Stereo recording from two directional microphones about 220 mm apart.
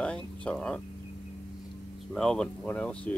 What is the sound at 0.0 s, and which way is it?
Speech, 5° left (ahead or behind).